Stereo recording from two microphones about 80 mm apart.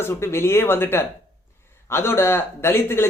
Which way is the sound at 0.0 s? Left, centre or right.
Left.